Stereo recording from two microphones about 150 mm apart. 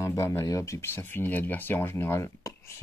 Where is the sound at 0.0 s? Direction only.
20° left (ahead or behind).